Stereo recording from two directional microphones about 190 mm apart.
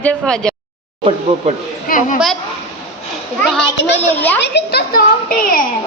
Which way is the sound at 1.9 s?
45° left (ahead or behind).